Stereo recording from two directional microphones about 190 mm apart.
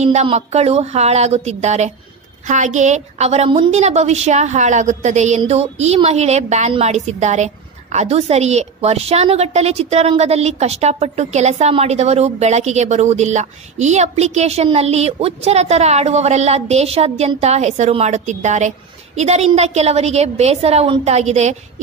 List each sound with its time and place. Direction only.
0.0 s a woman's voice: 35° right (ahead or behind)